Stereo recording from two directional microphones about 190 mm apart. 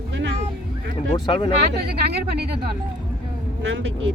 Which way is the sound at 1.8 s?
55° right (ahead or behind).